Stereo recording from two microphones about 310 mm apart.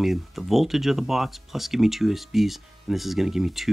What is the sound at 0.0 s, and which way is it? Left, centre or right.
Speech, centre.